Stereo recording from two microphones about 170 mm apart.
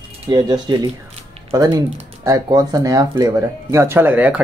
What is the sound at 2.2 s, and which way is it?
A woman's voice, 20° right (ahead or behind).